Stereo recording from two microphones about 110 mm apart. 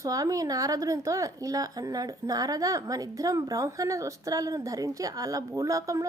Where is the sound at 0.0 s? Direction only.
30° right (ahead or behind).